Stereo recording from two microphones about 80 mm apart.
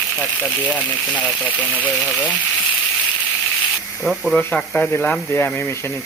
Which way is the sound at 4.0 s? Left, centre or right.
Centre.